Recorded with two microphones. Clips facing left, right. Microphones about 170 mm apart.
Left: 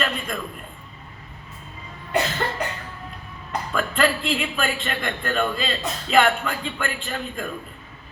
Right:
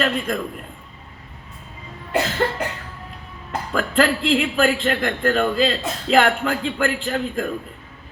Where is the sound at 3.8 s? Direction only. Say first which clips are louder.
Right 3 dB; 85° right.